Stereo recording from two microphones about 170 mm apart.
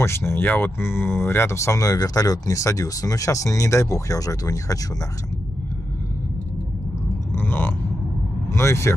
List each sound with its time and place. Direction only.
0.0 s speech: 15° left (ahead or behind)
7.3 s a sound: 10° left (ahead or behind)
8.5 s speech: 15° left (ahead or behind)